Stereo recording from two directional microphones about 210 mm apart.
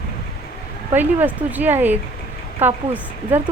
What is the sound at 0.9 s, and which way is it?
Speech, 10° right (ahead or behind).